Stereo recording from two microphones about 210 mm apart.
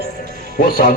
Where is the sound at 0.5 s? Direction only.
45° left (ahead or behind).